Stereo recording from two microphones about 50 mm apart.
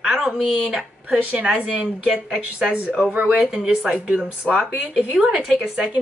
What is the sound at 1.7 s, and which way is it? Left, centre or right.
Speech, centre.